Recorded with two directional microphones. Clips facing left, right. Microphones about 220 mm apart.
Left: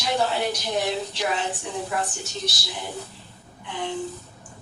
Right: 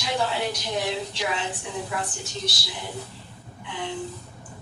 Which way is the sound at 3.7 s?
45° left (ahead or behind).